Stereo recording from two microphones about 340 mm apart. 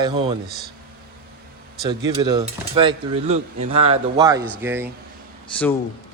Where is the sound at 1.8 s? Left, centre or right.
Centre.